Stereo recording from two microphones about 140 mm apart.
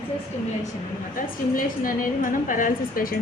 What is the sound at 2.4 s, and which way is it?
Speech, 75° left (ahead or behind).